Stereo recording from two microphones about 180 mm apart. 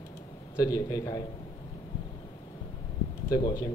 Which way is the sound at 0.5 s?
20° left (ahead or behind).